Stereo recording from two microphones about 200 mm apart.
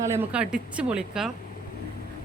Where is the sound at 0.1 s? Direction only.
10° right (ahead or behind).